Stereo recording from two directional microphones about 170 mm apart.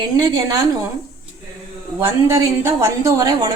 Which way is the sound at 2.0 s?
15° right (ahead or behind).